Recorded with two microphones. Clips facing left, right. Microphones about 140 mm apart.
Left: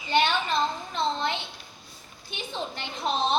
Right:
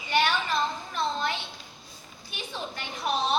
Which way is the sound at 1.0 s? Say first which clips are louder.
Left 2 dB; 20° left (ahead or behind).